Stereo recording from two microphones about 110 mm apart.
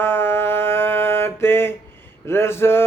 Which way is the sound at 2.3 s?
25° left (ahead or behind).